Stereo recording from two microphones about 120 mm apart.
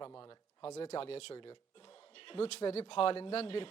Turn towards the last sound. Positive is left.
turn(degrees=50)  # may be behind; listen again after turning